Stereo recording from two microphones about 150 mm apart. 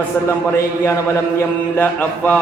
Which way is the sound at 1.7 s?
10° left (ahead or behind).